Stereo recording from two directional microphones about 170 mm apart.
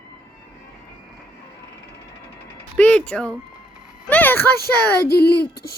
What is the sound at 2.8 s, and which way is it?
Speech, 5° left (ahead or behind).